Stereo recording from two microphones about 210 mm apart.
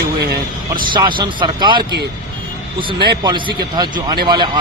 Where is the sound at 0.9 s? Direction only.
20° right (ahead or behind).